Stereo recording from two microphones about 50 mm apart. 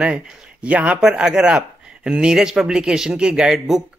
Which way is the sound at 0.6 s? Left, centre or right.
Right.